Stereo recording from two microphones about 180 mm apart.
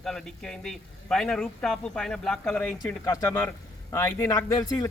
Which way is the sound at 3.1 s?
15° left (ahead or behind).